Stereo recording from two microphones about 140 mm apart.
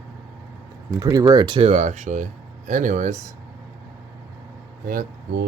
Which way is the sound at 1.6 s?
50° right (ahead or behind).